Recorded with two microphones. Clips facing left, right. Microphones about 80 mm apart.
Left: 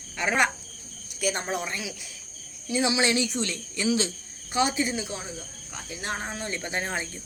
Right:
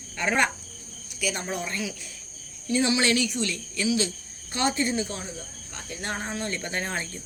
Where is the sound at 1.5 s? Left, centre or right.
Centre.